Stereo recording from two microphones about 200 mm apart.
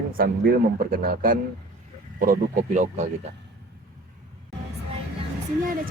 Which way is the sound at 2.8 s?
35° right (ahead or behind).